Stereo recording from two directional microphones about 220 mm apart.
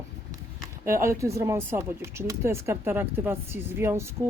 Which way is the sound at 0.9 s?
10° right (ahead or behind).